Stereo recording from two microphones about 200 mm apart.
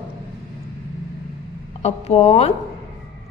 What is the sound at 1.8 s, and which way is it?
Speech, 30° left (ahead or behind).